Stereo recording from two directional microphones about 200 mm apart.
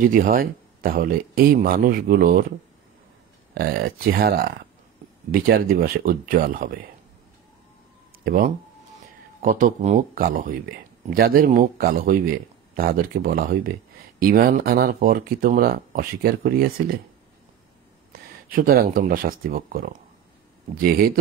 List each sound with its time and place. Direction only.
0.0 s speech: 40° right (ahead or behind)
3.5 s speech: 50° right (ahead or behind)
9.4 s speech: 40° right (ahead or behind)
18.5 s speech: 45° right (ahead or behind)